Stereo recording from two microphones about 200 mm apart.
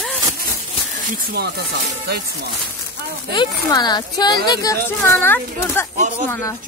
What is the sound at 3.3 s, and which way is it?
Speech, 20° left (ahead or behind).